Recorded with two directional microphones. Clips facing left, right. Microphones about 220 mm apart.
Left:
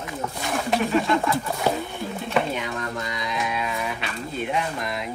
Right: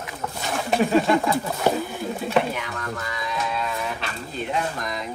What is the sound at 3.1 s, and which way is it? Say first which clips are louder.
Music: even; 20° left (ahead or behind).